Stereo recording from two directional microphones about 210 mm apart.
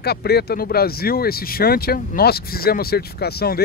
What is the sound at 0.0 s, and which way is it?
Speech, 50° left (ahead or behind).